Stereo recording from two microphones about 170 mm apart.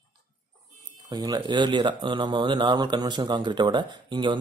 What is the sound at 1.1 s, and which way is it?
Speech, 25° right (ahead or behind).